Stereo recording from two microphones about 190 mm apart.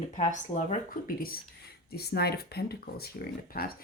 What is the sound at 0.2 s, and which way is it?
Speech, 40° left (ahead or behind).